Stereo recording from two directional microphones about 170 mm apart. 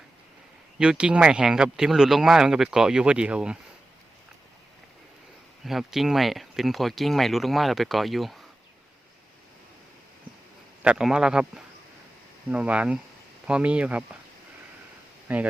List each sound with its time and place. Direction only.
0.8 s speech: 5° right (ahead or behind)
5.6 s speech: centre (ahead or behind)
10.8 s speech: 5° right (ahead or behind)
15.3 s speech: 10° right (ahead or behind)